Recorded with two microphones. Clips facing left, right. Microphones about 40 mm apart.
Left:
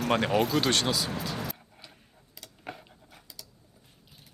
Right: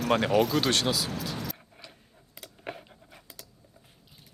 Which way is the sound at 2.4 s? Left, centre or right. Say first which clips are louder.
Right 2 dB; right.